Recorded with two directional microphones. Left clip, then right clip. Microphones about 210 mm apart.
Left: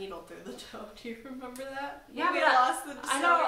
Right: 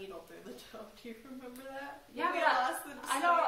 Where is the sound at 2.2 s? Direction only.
10° left (ahead or behind).